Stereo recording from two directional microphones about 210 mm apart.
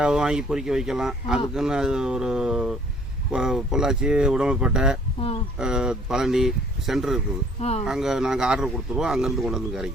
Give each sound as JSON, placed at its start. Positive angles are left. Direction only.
{"t": 0.0, "sound": "speech", "side_deg": -5}
{"t": 7.6, "sound": "speech", "side_deg": 30}
{"t": 7.9, "sound": "speech", "side_deg": 0}